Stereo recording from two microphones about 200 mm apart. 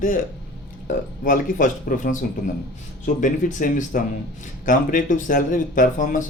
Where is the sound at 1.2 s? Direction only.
40° left (ahead or behind).